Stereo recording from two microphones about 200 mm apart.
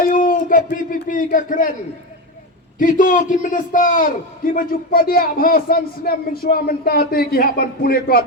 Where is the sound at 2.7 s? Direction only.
40° left (ahead or behind).